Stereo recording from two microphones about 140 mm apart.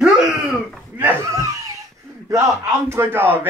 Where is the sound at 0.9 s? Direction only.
15° right (ahead or behind).